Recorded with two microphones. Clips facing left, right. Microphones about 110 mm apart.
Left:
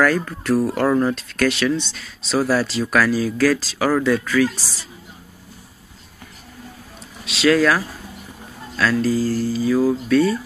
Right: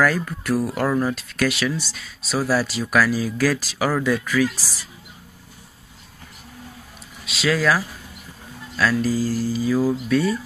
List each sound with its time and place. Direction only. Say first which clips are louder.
0.0 s speech: left 2 dB; 10° right (ahead or behind)
4.6 s a woman's voice: left 1 dB; 20° left (ahead or behind)
7.2 s speech: left 4 dB; centre (ahead or behind)